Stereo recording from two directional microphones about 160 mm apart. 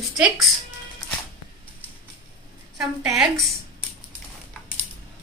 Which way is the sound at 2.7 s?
Centre (ahead or behind).